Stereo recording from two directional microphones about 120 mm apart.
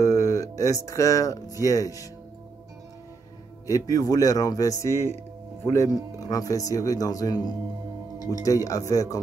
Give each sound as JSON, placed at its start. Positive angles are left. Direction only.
{"t": 0.0, "sound": "speech", "side_deg": 25}
{"t": 3.6, "sound": "speech", "side_deg": 30}